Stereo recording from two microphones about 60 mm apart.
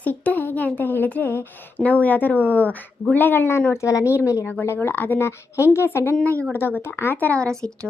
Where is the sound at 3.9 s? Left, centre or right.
Left.